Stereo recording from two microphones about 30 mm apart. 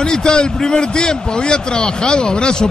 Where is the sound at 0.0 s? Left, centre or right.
Left.